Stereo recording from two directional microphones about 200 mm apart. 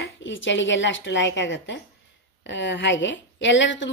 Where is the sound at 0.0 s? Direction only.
70° left (ahead or behind).